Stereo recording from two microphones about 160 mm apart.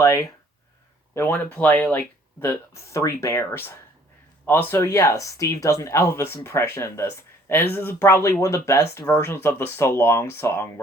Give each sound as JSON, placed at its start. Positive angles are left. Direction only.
{"t": 0.0, "sound": "speech", "side_deg": 20}